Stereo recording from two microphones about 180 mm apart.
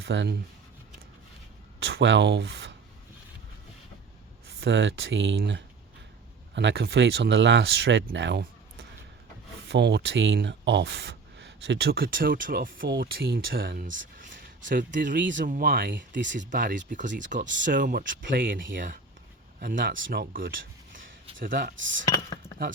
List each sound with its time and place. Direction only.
0.0 s speech: 75° right (ahead or behind)
1.8 s speech: 80° right
4.4 s speech: 70° right (ahead or behind)
9.6 s speech: 70° right (ahead or behind); by 17.4 s 45° right (ahead or behind)
17.4 s speech: 90° right
17.7 s speech: 50° right (ahead or behind); by 21.1 s 75° right (ahead or behind)
21.4 s speech: 55° right (ahead or behind); by 21.9 s 75° right (ahead or behind)
22.0 s speech: 20° left (ahead or behind)